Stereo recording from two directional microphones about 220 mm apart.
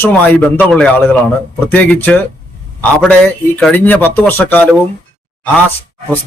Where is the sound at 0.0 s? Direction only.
5° left (ahead or behind).